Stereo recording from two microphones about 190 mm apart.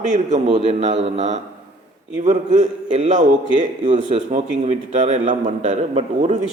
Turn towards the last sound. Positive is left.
turn(degrees=-35)  # may be behind; listen again after turning